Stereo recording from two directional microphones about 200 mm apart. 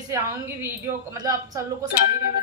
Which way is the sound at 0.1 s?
15° right (ahead or behind).